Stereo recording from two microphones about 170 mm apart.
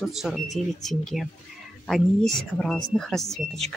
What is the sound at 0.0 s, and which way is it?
Speech, centre (ahead or behind).